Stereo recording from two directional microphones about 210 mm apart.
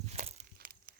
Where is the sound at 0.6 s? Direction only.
45° right (ahead or behind).